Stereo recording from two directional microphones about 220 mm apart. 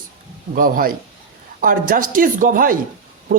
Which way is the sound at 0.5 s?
40° right (ahead or behind).